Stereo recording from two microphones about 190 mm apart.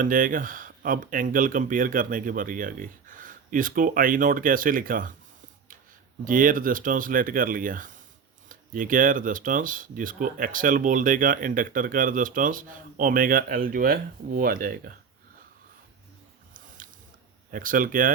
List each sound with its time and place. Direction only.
0.0 s speech: 45° right (ahead or behind)
6.2 s speech: 45° right (ahead or behind)
16.6 s a sound: 45° right (ahead or behind)
17.5 s speech: 45° right (ahead or behind)